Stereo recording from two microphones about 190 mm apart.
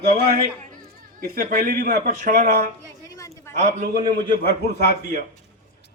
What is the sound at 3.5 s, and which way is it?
Speech, 40° right (ahead or behind).